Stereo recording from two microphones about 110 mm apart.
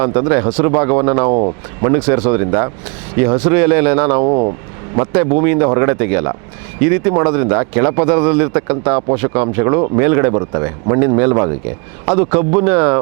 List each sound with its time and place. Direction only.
0.0 s speech: 30° right (ahead or behind)
2.0 s speech: 20° right (ahead or behind)